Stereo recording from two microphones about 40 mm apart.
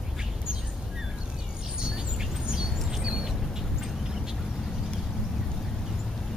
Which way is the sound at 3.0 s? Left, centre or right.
Centre.